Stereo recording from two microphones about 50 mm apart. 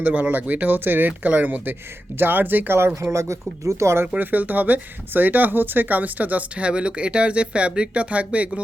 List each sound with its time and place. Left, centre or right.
0.0 s speech: right
2.1 s speech: right
2.9 s speech: right
4.2 s speech: right